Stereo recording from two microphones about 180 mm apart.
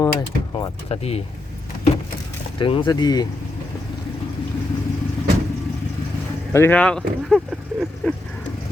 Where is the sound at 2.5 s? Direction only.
25° left (ahead or behind).